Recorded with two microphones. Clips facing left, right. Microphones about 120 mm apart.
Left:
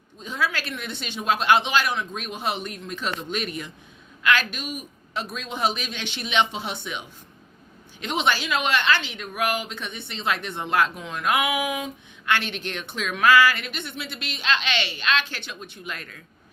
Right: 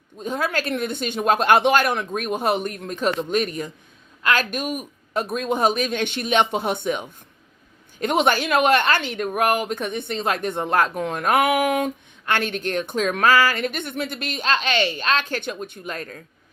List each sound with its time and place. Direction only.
0.2 s a woman's voice: 50° right (ahead or behind)
12.2 s a woman's voice: 45° right (ahead or behind)